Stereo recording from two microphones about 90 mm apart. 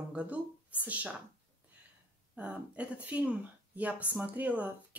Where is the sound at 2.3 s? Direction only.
15° right (ahead or behind).